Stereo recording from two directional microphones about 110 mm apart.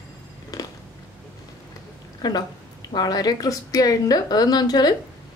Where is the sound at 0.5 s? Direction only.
35° left (ahead or behind).